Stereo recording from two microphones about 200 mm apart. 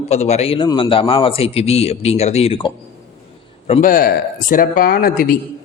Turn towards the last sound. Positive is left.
turn(degrees=45)  # may be behind; listen again after turning